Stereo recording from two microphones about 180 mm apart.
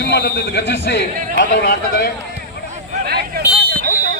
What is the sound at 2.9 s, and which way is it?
Speech, 60° right (ahead or behind).